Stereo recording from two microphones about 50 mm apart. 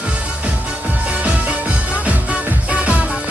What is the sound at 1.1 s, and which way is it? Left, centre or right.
Music, right.